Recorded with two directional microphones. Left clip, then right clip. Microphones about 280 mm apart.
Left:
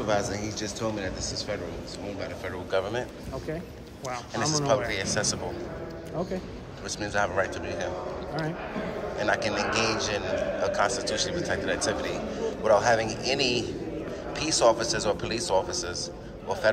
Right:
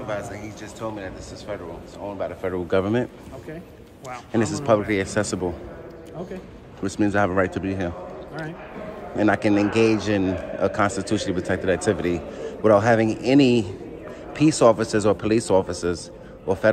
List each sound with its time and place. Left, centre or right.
0.0 s speech: centre
2.4 s a man's voice: right
4.3 s a man's voice: right
6.8 s a man's voice: right
9.1 s a man's voice: right